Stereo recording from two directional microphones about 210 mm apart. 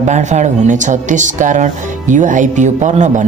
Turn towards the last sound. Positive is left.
turn(degrees=-35)  # may be behind; listen again after turning